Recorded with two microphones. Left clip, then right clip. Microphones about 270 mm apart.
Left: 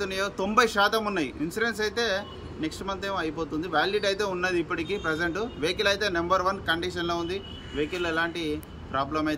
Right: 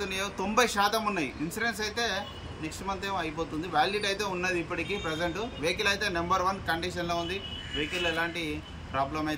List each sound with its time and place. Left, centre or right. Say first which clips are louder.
0.0 s speech: left 4 dB; centre